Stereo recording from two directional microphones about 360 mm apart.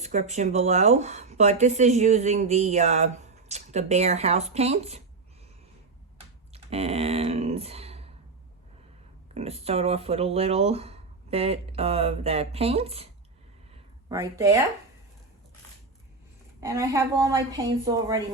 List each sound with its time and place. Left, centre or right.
0.0 s speech: centre
6.1 s computer keyboard: centre
9.3 s speech: centre
14.1 s speech: centre
16.6 s speech: centre